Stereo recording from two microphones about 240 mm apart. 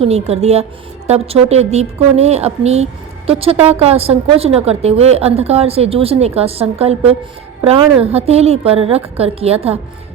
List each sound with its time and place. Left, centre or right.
0.0 s a woman's voice: right